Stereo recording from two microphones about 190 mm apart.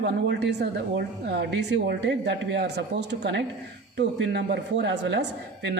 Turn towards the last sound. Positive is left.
turn(degrees=-65)  # may be behind; listen again after turning